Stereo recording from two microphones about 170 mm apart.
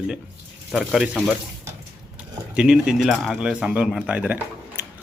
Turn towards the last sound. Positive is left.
turn(degrees=-10)  # may be behind; listen again after turning